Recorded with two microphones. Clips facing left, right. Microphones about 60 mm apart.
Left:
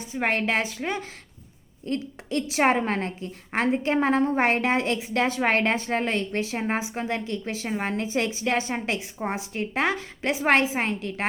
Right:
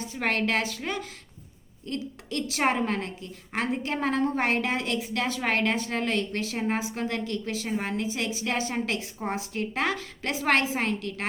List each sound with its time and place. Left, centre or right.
0.1 s a woman's voice: left